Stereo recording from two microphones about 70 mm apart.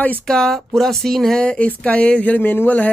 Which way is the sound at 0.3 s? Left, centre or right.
Centre.